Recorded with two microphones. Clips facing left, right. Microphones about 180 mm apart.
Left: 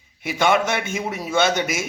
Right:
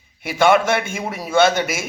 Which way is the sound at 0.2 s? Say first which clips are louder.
Right 4 dB; 55° right (ahead or behind).